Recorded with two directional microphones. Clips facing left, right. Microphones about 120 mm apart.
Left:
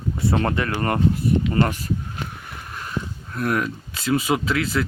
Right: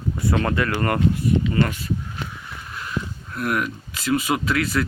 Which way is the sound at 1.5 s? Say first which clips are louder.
Left 1 dB; 40° left (ahead or behind).